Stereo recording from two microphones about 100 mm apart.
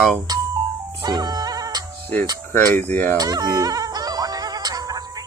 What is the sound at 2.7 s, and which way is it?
Fowl, 20° left (ahead or behind).